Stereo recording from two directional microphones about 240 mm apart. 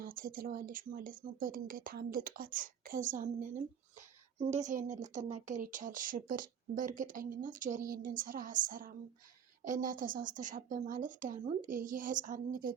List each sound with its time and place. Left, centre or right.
0.0 s speech: right